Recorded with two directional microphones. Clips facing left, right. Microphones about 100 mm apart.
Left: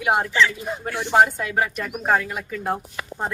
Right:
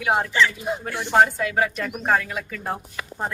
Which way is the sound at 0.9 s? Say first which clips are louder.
Left 1 dB; 5° left (ahead or behind).